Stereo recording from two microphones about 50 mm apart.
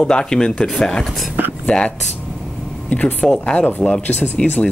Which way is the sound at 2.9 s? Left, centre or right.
Left.